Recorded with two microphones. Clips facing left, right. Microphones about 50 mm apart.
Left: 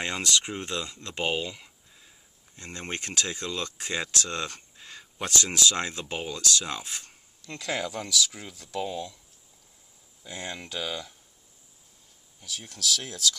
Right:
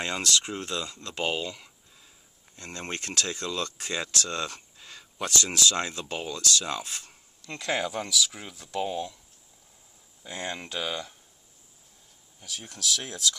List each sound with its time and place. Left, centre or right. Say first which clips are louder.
0.0 s speech: even; left
1.0 s a sound: left 1 dB; left
2.5 s speech: even; left
7.1 s a sound: right 1 dB; centre
8.0 s speech: even; centre
10.2 s speech: right 2 dB; centre
12.4 s speech: left 1 dB; centre